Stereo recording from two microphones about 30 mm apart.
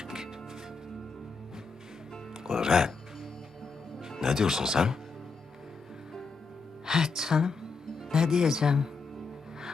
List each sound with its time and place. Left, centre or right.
0.0 s music: centre
2.4 s music: centre
4.2 s speech: centre
6.8 s speech: centre